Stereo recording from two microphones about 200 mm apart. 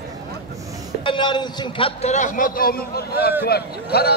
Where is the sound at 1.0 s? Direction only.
25° left (ahead or behind).